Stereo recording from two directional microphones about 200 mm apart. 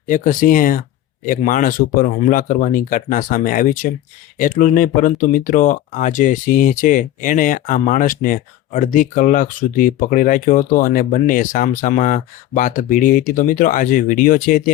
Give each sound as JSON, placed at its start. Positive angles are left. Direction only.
{"t": 0.1, "sound": "speech", "side_deg": 45}